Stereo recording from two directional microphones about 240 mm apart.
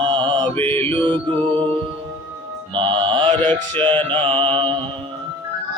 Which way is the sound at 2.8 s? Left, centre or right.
Right.